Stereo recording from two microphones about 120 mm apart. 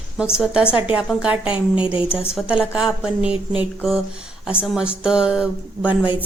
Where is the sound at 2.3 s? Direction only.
10° right (ahead or behind).